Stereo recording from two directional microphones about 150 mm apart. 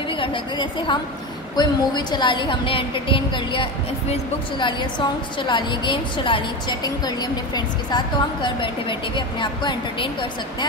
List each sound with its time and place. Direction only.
0.2 s a woman's voice: 35° left (ahead or behind)